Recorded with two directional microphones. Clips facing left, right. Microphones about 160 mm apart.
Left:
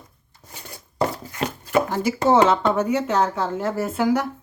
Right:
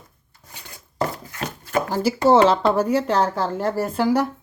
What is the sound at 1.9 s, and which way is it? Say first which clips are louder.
Speech: right 5 dB; 30° right (ahead or behind).